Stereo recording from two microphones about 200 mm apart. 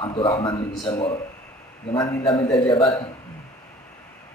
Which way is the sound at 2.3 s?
20° left (ahead or behind).